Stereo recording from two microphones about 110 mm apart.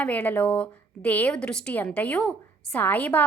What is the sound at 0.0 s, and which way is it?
A woman's voice, 15° left (ahead or behind).